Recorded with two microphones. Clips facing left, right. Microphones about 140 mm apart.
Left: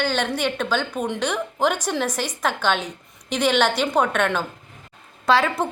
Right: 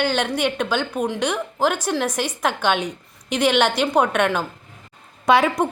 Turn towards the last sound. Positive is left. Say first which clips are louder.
# right 3 dB
turn(degrees=-15)  # may be behind; listen again after turning